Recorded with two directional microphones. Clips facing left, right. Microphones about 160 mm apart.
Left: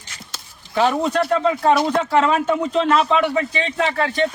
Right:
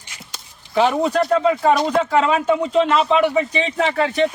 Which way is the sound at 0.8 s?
10° right (ahead or behind).